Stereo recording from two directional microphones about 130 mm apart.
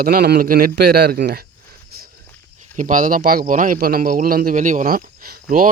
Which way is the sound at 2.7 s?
80° right.